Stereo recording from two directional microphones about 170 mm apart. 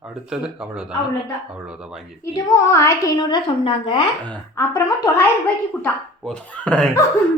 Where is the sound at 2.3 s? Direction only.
20° left (ahead or behind).